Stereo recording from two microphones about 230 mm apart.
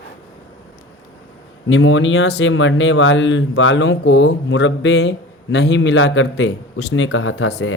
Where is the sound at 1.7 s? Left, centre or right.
Left.